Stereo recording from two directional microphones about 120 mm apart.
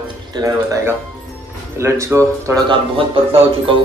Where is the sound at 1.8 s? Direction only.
20° right (ahead or behind).